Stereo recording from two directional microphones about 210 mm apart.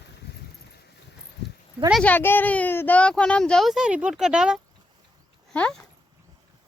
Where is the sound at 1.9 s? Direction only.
5° left (ahead or behind).